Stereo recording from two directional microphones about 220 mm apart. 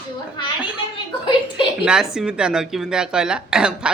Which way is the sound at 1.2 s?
20° left (ahead or behind).